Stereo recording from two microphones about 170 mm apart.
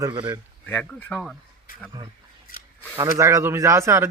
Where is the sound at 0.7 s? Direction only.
10° left (ahead or behind).